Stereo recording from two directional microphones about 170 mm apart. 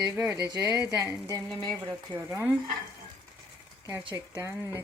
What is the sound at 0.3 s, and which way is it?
Speech, 20° right (ahead or behind).